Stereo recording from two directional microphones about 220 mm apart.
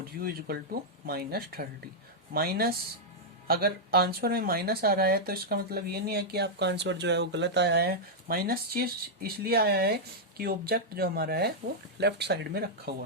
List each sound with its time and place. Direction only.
0.2 s speech: 45° right (ahead or behind)